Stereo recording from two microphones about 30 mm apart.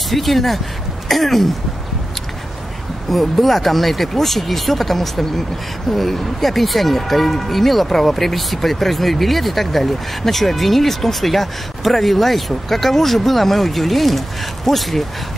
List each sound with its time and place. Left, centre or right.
0.1 s speech: centre
3.1 s speech: centre